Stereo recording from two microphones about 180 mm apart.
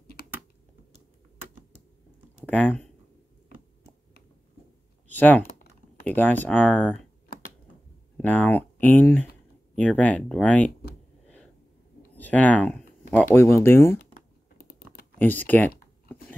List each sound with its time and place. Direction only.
2.4 s speech: 10° left (ahead or behind)
5.0 s speech: 10° left (ahead or behind)
8.2 s speech: 10° left (ahead or behind)
12.2 s speech: 10° left (ahead or behind)
13.9 s typing: 55° left (ahead or behind)
15.1 s speech: 10° left (ahead or behind)